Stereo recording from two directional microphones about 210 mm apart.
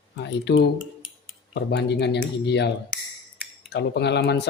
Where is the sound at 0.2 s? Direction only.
55° left (ahead or behind).